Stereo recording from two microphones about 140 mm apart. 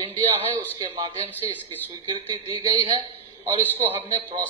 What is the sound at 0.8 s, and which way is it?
A man's voice, 30° right (ahead or behind).